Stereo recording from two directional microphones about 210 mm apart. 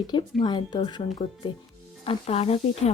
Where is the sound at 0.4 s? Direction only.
20° left (ahead or behind).